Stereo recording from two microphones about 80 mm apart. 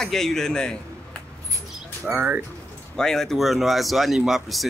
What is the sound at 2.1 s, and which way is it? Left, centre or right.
Speech, right.